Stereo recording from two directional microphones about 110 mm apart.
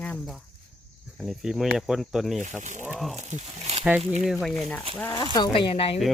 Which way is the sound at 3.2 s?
90° right.